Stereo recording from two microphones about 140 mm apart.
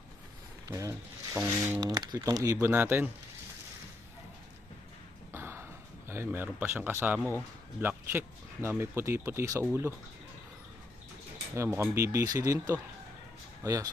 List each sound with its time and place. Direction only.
0.7 s speech: 20° right (ahead or behind)
5.3 s a sound: 15° right (ahead or behind)
6.1 s speech: 15° right (ahead or behind)
11.5 s speech: 20° right (ahead or behind)
12.5 s speech: 15° right (ahead or behind)
13.6 s speech: 25° right (ahead or behind)